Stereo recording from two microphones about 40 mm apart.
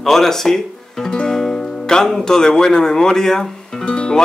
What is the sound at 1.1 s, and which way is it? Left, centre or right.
Music, centre.